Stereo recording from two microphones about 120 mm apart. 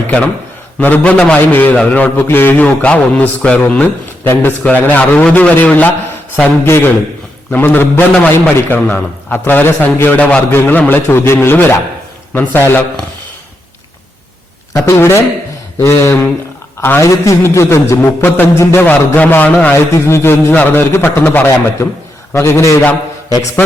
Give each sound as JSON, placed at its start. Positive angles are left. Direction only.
{"t": 0.8, "sound": "a man's voice", "side_deg": 15}
{"t": 14.7, "sound": "a man's voice", "side_deg": 25}